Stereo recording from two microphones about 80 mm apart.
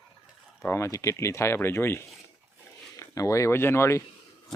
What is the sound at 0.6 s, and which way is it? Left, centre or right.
Speech, left.